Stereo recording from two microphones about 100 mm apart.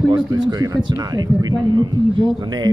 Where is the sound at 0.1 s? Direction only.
40° right (ahead or behind).